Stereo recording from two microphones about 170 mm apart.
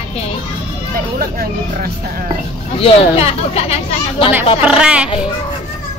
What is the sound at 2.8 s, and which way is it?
Speech, 35° left (ahead or behind).